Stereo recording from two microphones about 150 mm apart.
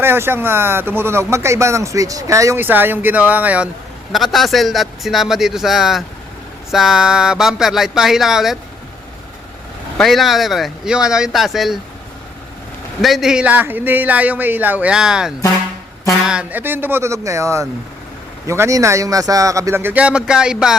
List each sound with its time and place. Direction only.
0.0 s speech: 15° right (ahead or behind)
10.0 s speech: centre (ahead or behind)
13.0 s speech: centre (ahead or behind)